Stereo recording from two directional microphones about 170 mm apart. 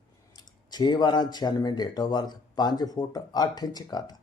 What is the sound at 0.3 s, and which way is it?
Speech, 25° left (ahead or behind).